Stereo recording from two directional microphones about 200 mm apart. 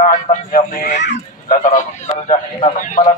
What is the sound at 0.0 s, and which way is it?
A man's voice, 40° left (ahead or behind).